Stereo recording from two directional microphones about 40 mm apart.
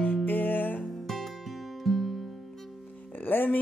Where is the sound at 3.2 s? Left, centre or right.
Left.